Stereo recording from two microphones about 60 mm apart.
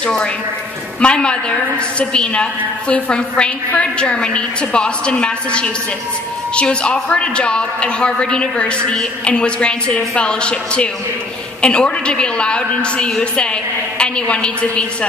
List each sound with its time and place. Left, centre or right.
1.0 s a woman's voice: centre